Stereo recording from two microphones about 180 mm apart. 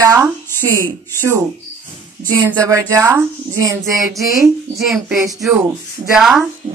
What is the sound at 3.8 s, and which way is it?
A child's voice, centre (ahead or behind).